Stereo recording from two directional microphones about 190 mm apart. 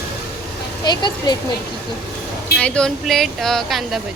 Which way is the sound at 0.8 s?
20° left (ahead or behind).